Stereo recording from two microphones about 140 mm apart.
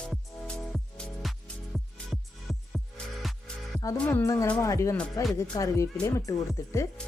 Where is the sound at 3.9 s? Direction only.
10° left (ahead or behind).